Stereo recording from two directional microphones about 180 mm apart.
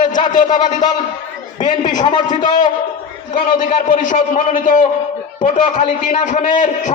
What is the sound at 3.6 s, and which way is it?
A man's voice, 50° left (ahead or behind).